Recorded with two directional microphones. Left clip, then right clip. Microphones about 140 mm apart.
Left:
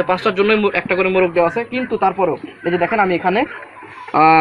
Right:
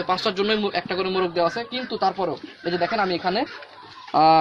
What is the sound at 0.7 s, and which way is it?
Speech, 90° right.